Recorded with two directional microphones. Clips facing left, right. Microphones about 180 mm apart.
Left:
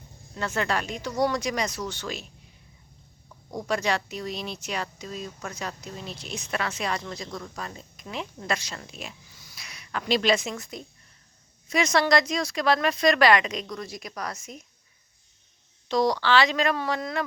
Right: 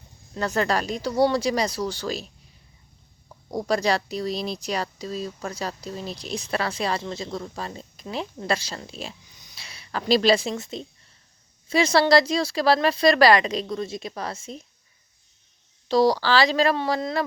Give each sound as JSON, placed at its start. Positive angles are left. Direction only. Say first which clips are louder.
{"t": 0.3, "sound": "speech", "louder": "right 4 dB", "side_deg": -40}
{"t": 3.5, "sound": "speech", "louder": "right 4 dB", "side_deg": -35}
{"t": 9.3, "sound": "a sound", "louder": "even", "side_deg": -20}
{"t": 11.7, "sound": "speech", "louder": "right 4 dB", "side_deg": -30}
{"t": 15.9, "sound": "speech", "louder": "right 3 dB", "side_deg": -35}